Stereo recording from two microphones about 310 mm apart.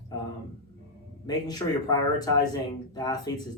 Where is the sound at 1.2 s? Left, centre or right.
Centre.